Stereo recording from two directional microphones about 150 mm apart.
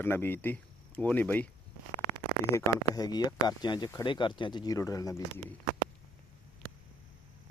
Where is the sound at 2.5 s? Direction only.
25° left (ahead or behind).